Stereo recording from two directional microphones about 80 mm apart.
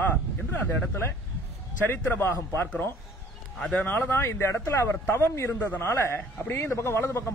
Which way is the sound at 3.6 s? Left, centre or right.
Centre.